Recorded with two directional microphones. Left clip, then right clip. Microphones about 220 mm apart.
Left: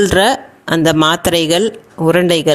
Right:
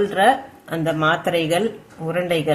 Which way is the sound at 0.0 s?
45° left (ahead or behind).